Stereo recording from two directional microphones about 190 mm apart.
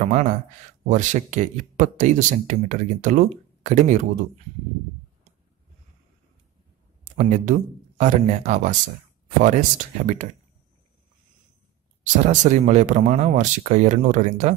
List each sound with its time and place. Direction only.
0.0 s speech: 40° right (ahead or behind)
7.2 s speech: 45° right (ahead or behind)
12.0 s speech: 40° right (ahead or behind)